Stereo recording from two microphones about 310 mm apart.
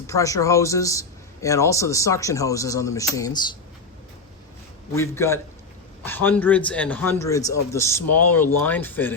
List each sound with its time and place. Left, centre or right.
0.1 s a man's voice: centre
4.9 s a man's voice: centre
8.0 s speech: left
8.6 s speech: centre